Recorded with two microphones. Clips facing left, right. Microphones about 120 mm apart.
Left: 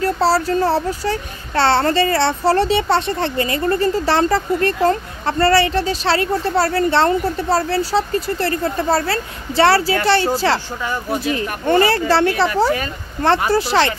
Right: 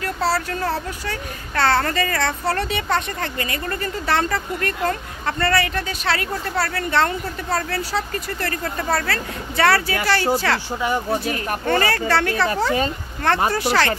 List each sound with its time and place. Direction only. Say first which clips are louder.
0.0 s a child's voice: left 6 dB; 35° left (ahead or behind)
10.8 s speech: right 1 dB; 15° right (ahead or behind)
11.2 s speech: left 3 dB; 25° left (ahead or behind)
13.5 s speech: left 4 dB; 30° left (ahead or behind)